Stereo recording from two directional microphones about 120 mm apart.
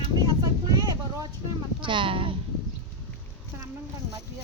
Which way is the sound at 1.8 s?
45° right (ahead or behind).